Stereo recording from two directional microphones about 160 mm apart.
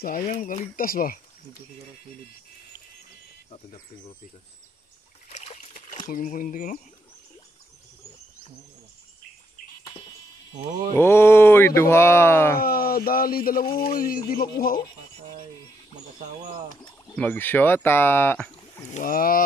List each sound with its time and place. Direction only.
0.3 s speech: 55° left (ahead or behind)
5.3 s trickle: 45° left (ahead or behind)
6.0 s speech: 55° left (ahead or behind)
9.8 s a sound: 30° left (ahead or behind)
11.0 s speech: 15° left (ahead or behind)
12.5 s speech: 65° left (ahead or behind)
17.1 s speech: 10° left (ahead or behind)
18.9 s speech: 55° left (ahead or behind)